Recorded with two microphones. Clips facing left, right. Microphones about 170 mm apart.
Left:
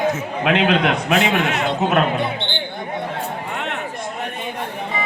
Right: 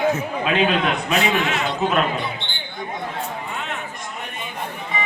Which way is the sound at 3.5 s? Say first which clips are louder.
Left 3 dB; 65° left (ahead or behind).